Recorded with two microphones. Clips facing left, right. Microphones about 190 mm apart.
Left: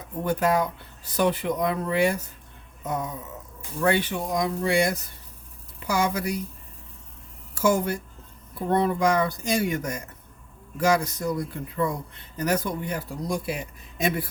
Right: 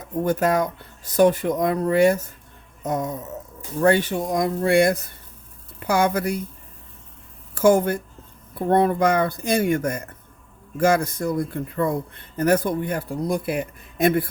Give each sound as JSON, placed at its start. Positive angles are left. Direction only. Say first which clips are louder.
{"t": 0.3, "sound": "a man's voice", "louder": "right 2 dB", "side_deg": -45}
{"t": 7.5, "sound": "a woman's voice", "louder": "right 6 dB", "side_deg": -55}